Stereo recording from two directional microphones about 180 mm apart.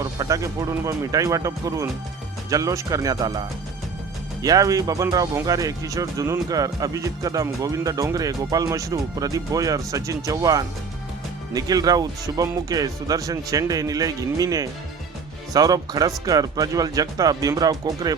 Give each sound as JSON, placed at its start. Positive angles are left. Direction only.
{"t": 0.0, "sound": "speech", "side_deg": -20}
{"t": 4.4, "sound": "speech", "side_deg": -20}